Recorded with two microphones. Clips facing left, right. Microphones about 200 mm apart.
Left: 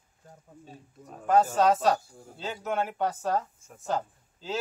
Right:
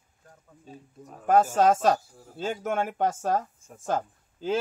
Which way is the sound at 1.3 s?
50° right (ahead or behind).